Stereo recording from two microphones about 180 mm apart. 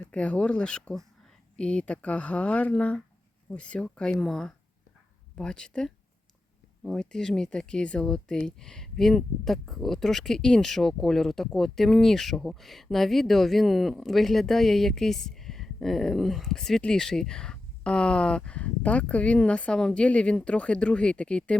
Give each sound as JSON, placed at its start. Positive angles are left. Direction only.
{"t": 0.1, "sound": "speech", "side_deg": 5}